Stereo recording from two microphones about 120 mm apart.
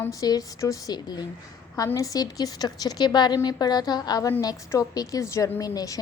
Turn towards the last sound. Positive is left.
turn(degrees=30)  # may be behind; listen again after turning